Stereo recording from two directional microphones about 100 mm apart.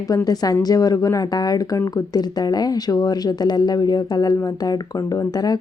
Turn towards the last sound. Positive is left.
turn(degrees=40)  # may be behind; listen again after turning